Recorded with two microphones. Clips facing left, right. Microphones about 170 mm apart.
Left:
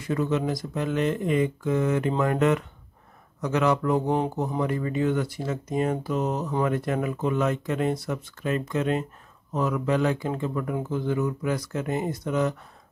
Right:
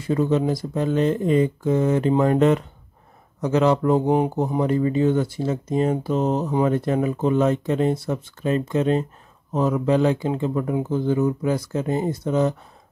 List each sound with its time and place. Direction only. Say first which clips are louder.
0.0 s speech: right 5 dB; 30° right (ahead or behind)